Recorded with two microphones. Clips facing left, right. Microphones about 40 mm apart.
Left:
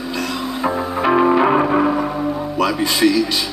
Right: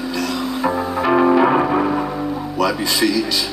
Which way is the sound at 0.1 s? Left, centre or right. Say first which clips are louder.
Even; left.